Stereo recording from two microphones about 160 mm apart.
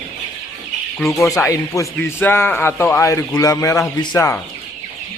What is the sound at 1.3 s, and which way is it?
A man's voice, 20° left (ahead or behind).